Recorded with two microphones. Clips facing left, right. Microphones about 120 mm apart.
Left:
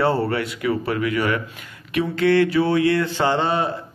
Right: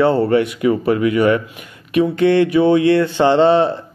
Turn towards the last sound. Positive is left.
turn(degrees=-25)  # may be behind; listen again after turning